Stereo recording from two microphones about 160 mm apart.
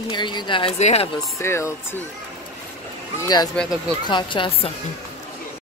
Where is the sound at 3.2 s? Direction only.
25° left (ahead or behind).